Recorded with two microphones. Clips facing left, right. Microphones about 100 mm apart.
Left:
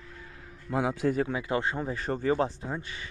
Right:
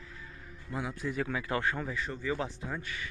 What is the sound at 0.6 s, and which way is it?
Speech, 90° left.